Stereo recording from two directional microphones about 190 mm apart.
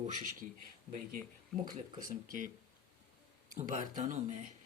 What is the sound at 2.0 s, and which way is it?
Speech, 45° right (ahead or behind).